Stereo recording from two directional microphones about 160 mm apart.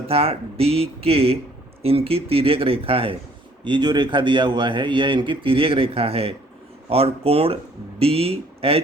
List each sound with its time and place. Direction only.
0.1 s a man's voice: 35° right (ahead or behind)